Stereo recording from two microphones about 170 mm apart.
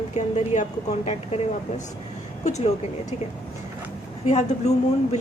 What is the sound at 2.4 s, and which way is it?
Speech, 40° left (ahead or behind).